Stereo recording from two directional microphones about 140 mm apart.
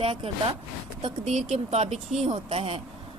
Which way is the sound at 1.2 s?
55° right (ahead or behind).